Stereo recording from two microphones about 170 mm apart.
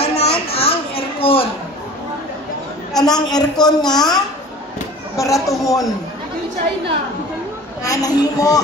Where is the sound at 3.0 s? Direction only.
25° left (ahead or behind).